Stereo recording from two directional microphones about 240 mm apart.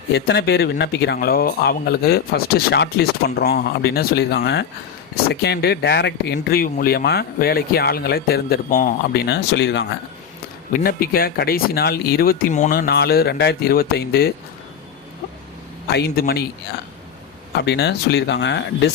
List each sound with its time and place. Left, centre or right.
0.1 s speech: left
15.9 s speech: left
17.6 s speech: left